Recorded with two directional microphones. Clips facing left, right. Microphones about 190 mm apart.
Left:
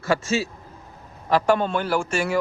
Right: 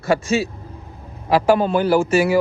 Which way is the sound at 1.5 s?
5° right (ahead or behind).